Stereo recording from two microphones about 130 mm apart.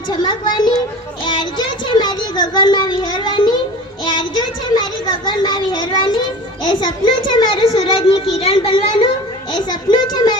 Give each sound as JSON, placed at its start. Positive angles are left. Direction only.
{"t": 0.1, "sound": "speech", "side_deg": 35}
{"t": 4.0, "sound": "child singing", "side_deg": 35}
{"t": 5.2, "sound": "a child's voice", "side_deg": 35}
{"t": 9.5, "sound": "a child's voice", "side_deg": 35}